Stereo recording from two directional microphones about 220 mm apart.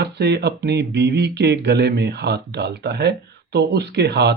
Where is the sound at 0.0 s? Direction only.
50° right (ahead or behind).